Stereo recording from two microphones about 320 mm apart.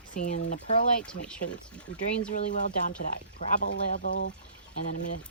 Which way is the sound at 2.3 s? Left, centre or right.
Left.